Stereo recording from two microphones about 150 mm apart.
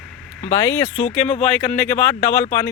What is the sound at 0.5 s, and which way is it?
Speech, 10° left (ahead or behind).